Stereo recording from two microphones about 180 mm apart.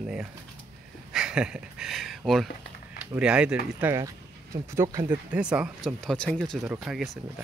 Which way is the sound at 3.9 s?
15° right (ahead or behind).